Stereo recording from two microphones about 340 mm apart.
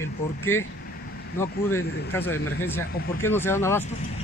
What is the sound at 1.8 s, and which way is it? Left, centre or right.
Speech, left.